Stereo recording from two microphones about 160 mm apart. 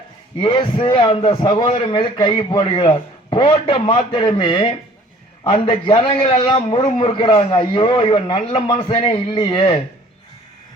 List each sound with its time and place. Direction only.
0.3 s a man's voice: 30° left (ahead or behind)